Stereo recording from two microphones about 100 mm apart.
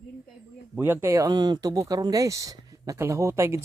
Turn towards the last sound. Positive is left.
turn(degrees=-25)  # may be behind; listen again after turning